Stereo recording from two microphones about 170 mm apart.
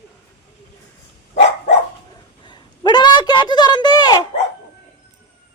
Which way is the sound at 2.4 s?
25° left (ahead or behind).